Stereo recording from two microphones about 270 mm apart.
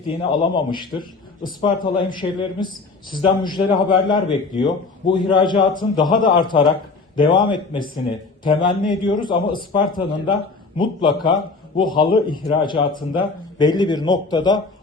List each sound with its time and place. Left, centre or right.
0.3 s a man's voice: centre